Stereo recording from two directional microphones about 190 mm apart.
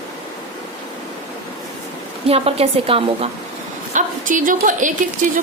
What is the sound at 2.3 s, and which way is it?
A woman's voice, 30° right (ahead or behind).